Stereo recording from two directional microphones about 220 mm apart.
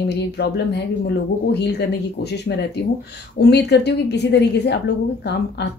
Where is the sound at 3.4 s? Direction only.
50° left (ahead or behind).